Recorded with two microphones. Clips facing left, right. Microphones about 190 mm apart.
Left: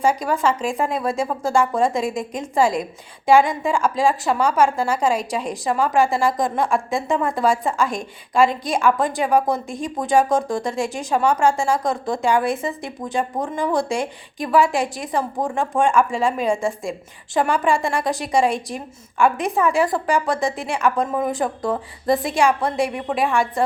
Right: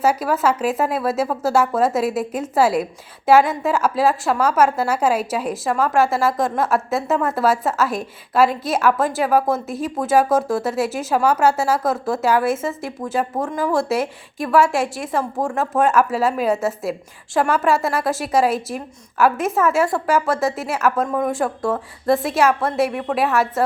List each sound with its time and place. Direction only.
0.0 s a woman's voice: 5° right (ahead or behind)